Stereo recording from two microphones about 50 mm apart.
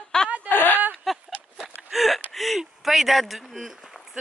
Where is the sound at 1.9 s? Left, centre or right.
Centre.